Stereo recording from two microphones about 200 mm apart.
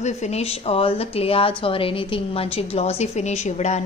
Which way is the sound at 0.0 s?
35° left (ahead or behind).